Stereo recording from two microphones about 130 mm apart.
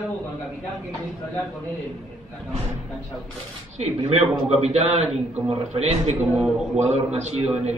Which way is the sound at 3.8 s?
55° right (ahead or behind).